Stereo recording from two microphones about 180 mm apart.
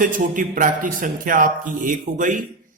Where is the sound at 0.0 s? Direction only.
50° right (ahead or behind).